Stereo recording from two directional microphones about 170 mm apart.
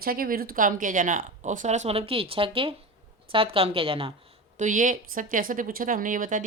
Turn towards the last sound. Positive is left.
turn(degrees=-50)  # may be behind; listen again after turning